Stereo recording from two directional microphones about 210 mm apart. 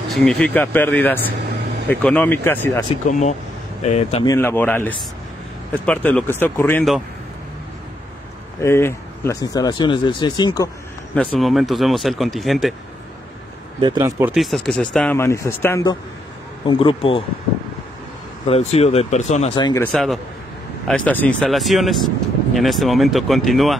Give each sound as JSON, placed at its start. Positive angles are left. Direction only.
{"t": 0.1, "sound": "speech", "side_deg": 0}
{"t": 3.1, "sound": "speech", "side_deg": 35}
{"t": 4.2, "sound": "speech", "side_deg": 15}
{"t": 8.5, "sound": "speech", "side_deg": 10}
{"t": 11.1, "sound": "speech", "side_deg": 0}
{"t": 13.7, "sound": "speech", "side_deg": -20}
{"t": 14.3, "sound": "speech", "side_deg": 0}
{"t": 18.5, "sound": "speech", "side_deg": 30}
{"t": 19.5, "sound": "speech", "side_deg": 20}
{"t": 19.8, "sound": "speech", "side_deg": 0}